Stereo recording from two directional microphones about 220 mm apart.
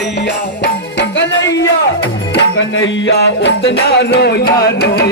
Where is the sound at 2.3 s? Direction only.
60° left (ahead or behind).